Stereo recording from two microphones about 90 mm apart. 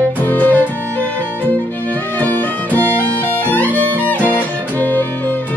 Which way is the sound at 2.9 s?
20° left (ahead or behind).